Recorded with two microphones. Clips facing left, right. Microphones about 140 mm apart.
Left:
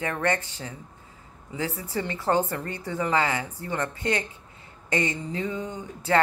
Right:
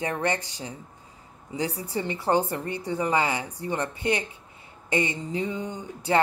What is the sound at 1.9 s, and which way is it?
A woman's voice, 15° right (ahead or behind).